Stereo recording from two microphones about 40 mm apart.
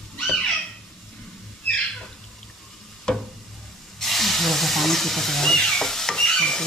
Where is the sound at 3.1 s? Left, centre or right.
Centre.